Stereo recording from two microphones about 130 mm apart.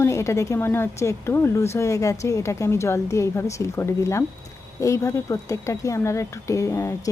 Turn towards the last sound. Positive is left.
turn(degrees=20)  # may be behind; listen again after turning